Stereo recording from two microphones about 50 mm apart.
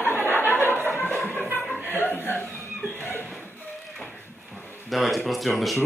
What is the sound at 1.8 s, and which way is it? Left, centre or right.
Speech, left.